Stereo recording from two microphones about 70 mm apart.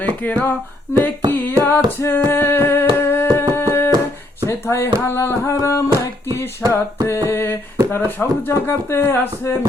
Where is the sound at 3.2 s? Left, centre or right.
Right.